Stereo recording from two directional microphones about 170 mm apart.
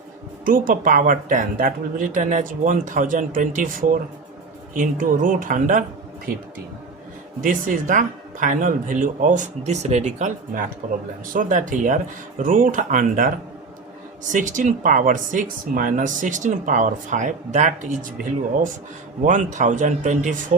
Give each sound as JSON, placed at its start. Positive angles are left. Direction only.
{"t": 0.4, "sound": "speech", "side_deg": -55}
{"t": 7.4, "sound": "speech", "side_deg": -50}
{"t": 14.3, "sound": "speech", "side_deg": -50}
{"t": 19.2, "sound": "speech", "side_deg": -45}